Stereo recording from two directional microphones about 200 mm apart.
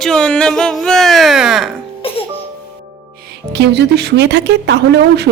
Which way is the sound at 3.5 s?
55° right (ahead or behind).